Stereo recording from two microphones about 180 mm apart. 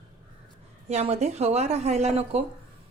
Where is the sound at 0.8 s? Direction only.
35° right (ahead or behind).